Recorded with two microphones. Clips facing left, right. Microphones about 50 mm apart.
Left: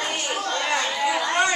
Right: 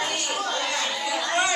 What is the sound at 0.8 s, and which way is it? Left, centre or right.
Chatter, centre.